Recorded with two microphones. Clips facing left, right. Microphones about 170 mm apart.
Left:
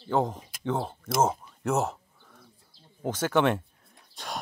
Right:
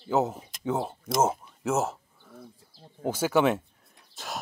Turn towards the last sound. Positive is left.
turn(degrees=0)  # may be behind; listen again after turning